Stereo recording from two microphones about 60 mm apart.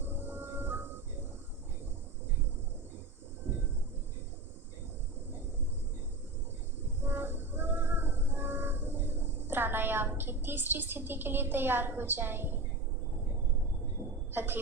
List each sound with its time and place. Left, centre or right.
0.0 s music: right
7.0 s music: right
14.0 s a sound: right
14.3 s a woman's voice: right